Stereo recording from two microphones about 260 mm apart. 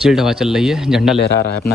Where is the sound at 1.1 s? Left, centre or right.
Left.